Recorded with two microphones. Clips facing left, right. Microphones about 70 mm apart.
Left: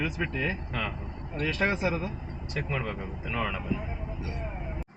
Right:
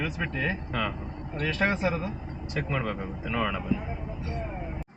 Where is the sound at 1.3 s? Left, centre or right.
Right.